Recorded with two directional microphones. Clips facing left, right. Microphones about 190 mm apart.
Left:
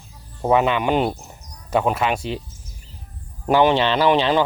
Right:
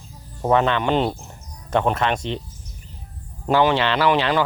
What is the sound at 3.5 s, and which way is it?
Speech, 15° left (ahead or behind).